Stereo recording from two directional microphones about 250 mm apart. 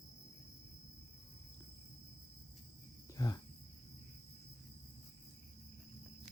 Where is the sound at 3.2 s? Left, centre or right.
Centre.